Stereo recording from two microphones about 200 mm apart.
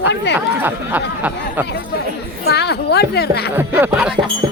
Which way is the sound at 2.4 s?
55° left (ahead or behind).